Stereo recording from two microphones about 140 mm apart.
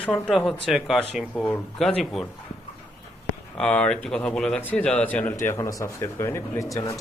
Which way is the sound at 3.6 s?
10° left (ahead or behind).